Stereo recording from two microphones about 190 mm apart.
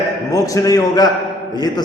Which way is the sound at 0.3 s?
15° left (ahead or behind).